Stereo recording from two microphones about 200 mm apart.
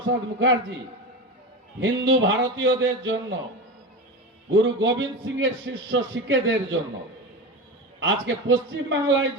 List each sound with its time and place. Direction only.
0.3 s a man's voice: 70° right (ahead or behind)
1.8 s a man's voice: 65° right (ahead or behind)
4.5 s a man's voice: 65° right (ahead or behind)
7.9 s a man's voice: 65° right (ahead or behind)